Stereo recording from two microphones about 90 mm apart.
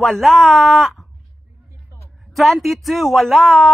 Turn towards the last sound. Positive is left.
turn(degrees=0)  # may be behind; listen again after turning